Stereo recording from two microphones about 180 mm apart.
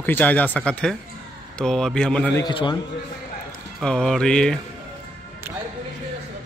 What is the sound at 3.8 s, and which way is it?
Speech, 5° left (ahead or behind).